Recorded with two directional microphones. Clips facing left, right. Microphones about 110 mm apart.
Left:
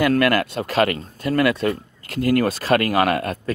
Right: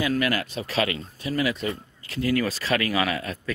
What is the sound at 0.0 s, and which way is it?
Speech, 60° left (ahead or behind).